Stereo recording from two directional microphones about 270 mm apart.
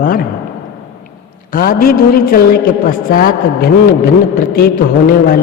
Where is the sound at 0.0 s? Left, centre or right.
Left.